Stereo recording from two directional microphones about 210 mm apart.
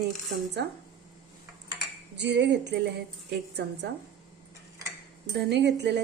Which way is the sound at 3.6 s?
50° right (ahead or behind).